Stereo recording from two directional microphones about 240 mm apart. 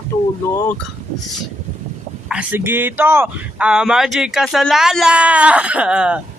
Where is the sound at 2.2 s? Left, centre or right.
Centre.